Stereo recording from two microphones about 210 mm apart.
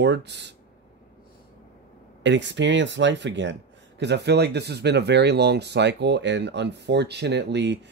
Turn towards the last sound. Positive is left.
turn(degrees=-55)  # may be behind; listen again after turning